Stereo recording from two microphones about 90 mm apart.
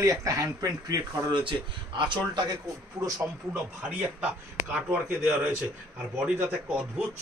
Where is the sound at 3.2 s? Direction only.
15° right (ahead or behind).